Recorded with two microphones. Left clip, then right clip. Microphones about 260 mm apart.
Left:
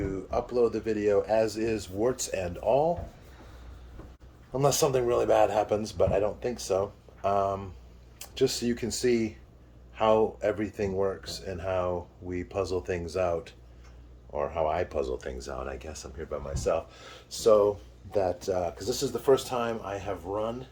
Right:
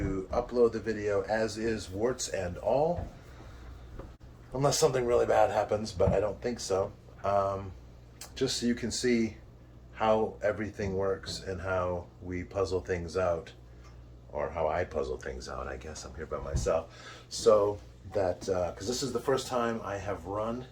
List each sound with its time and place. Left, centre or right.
0.3 s speech: left
4.5 s speech: left